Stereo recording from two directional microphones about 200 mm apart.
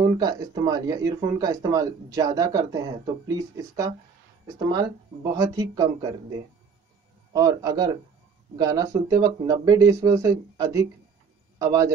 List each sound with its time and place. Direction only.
0.0 s speech: 20° right (ahead or behind)
7.3 s a man's voice: 20° right (ahead or behind)